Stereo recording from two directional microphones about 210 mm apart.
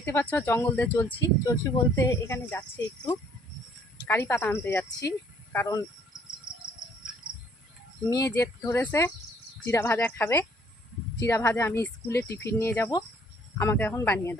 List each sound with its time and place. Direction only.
0.0 s speech: 10° left (ahead or behind)
4.0 s speech: 10° left (ahead or behind)
8.1 s speech: 15° left (ahead or behind)